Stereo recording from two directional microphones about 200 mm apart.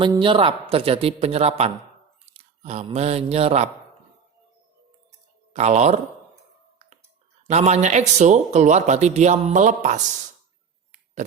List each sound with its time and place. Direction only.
0.0 s a man's voice: 25° right (ahead or behind)
5.5 s speech: 35° right (ahead or behind)
7.4 s speech: 35° right (ahead or behind)